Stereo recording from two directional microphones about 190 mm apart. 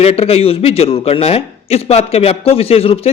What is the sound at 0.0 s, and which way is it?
A man's voice, 30° left (ahead or behind).